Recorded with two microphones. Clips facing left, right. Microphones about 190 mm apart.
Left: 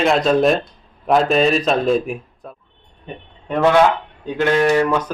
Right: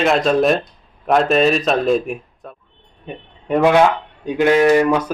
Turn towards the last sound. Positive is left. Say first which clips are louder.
# right 3 dB
turn(degrees=-10)  # may be behind; listen again after turning